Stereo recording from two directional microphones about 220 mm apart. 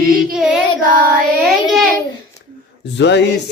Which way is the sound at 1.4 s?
Centre (ahead or behind).